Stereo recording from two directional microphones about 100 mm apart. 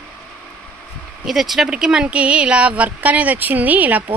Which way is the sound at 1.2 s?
5° right (ahead or behind).